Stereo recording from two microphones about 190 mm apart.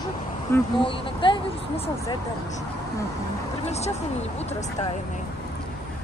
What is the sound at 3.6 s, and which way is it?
Speech, 35° left (ahead or behind).